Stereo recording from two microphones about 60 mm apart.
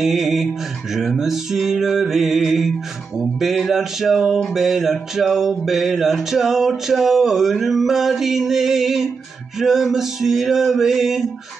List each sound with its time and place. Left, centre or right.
0.0 s speech: centre